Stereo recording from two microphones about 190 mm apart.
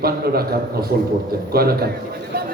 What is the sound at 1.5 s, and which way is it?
Speech, 55° right (ahead or behind).